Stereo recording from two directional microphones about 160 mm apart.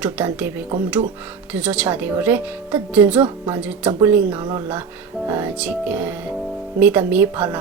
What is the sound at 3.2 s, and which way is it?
Speech, 25° right (ahead or behind).